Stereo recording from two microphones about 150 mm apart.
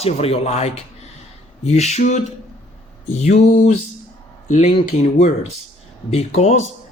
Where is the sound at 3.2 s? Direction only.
45° left (ahead or behind).